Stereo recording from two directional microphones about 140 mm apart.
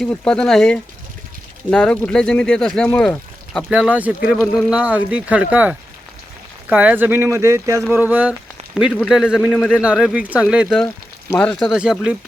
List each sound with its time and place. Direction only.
0.0 s speech: 5° left (ahead or behind)
3.7 s a man's voice: 5° right (ahead or behind)
11.3 s speech: 10° left (ahead or behind)
11.7 s speech: 5° right (ahead or behind)